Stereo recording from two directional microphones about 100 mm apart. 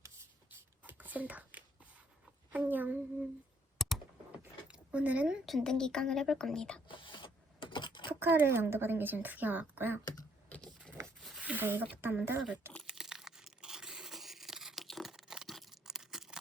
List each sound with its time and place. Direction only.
0.9 s a sound: 15° right (ahead or behind)
3.8 s computer keyboard: centre (ahead or behind)
4.7 s a sound: 10° right (ahead or behind)
5.5 s a woman's voice: 5° left (ahead or behind)
6.8 s printer: 55° left (ahead or behind)
8.1 s a woman's voice: 20° right (ahead or behind)
11.2 s a sound: centre (ahead or behind)
11.4 s speech: 20° right (ahead or behind)
12.8 s tearing: 5° right (ahead or behind)